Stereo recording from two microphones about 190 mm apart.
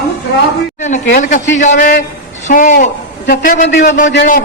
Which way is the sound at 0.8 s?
40° left (ahead or behind).